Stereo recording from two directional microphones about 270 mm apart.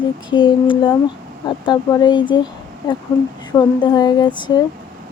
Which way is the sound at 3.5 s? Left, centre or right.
Centre.